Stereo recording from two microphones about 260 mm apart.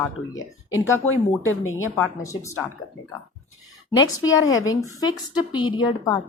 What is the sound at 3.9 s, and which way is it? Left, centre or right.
A woman's voice, centre.